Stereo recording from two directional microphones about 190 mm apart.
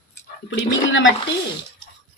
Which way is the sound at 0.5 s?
85° left.